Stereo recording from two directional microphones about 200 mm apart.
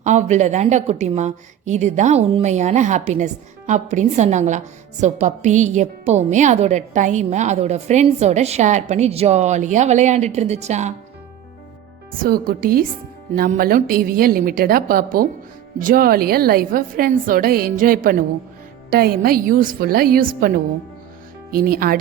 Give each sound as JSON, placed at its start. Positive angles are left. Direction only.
{"t": 0.0, "sound": "a woman's voice", "side_deg": -35}
{"t": 12.2, "sound": "a woman's voice", "side_deg": -45}